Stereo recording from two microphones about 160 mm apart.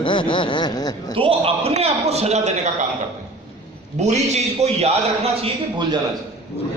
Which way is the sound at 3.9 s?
45° right (ahead or behind).